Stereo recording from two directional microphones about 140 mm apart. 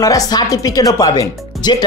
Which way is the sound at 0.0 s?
25° left (ahead or behind).